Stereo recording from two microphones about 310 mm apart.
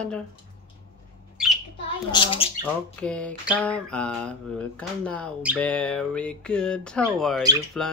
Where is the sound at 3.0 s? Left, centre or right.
Centre.